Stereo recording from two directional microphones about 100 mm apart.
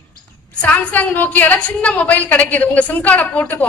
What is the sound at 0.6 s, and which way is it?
A woman's voice, 15° left (ahead or behind).